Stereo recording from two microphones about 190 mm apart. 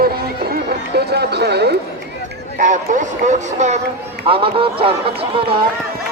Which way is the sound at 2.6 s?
40° right (ahead or behind).